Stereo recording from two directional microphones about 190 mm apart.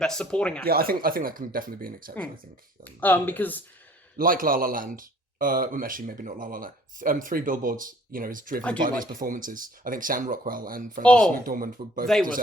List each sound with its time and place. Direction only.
0.0 s speech: 5° left (ahead or behind)
0.6 s speech: 50° right (ahead or behind)
2.8 s speech: 10° left (ahead or behind)
4.2 s speech: 45° right (ahead or behind)
11.0 s speech: 5° left (ahead or behind)
11.3 s speech: 45° right (ahead or behind)